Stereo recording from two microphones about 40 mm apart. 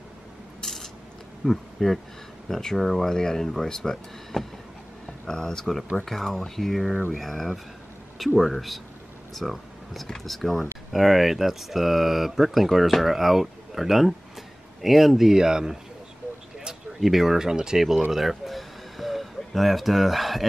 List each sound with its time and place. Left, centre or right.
0.6 s a sound: centre
1.4 s speech: centre
9.3 s music: centre
10.0 s speech: centre
17.0 s speech: centre
18.1 s gasp: centre